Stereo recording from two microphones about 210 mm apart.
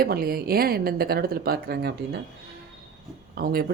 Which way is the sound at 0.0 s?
45° right (ahead or behind).